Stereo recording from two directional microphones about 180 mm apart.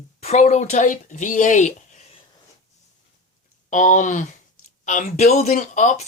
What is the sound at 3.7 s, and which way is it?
Speech, 45° left (ahead or behind).